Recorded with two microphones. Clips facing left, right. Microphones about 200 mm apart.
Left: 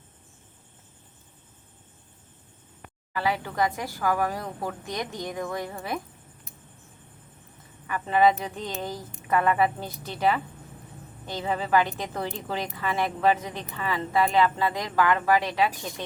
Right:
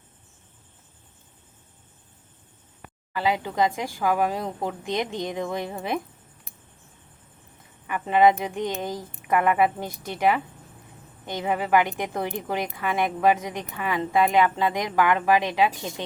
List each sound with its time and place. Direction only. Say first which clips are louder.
3.2 s speech: right 3 dB; 15° right (ahead or behind)
7.9 s speech: right 2 dB; 15° right (ahead or behind)